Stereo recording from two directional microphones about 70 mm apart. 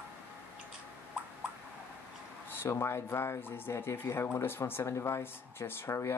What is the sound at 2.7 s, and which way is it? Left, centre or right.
Speech, left.